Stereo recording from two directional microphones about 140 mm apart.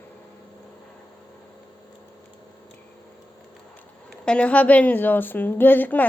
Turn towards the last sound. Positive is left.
turn(degrees=10)  # may be behind; listen again after turning